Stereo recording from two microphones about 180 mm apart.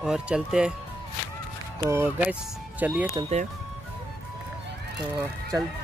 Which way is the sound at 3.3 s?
35° right (ahead or behind).